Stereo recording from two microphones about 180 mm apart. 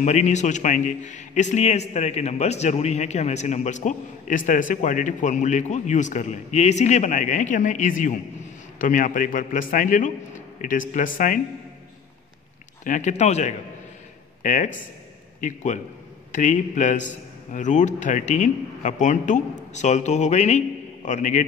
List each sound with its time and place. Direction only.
0.0 s a man's voice: 40° left (ahead or behind)
12.8 s a man's voice: 45° left (ahead or behind)